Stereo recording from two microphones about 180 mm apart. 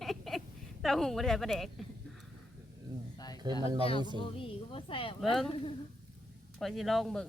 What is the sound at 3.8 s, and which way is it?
A woman's voice, 30° left (ahead or behind).